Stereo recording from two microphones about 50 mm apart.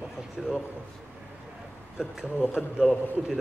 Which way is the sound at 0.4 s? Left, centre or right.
Centre.